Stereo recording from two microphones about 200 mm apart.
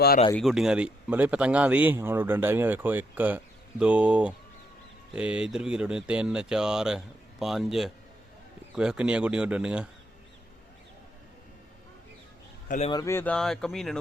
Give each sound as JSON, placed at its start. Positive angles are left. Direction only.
{"t": 0.3, "sound": "speech", "side_deg": 0}
{"t": 12.6, "sound": "a man's voice", "side_deg": 40}
{"t": 12.9, "sound": "speech", "side_deg": 15}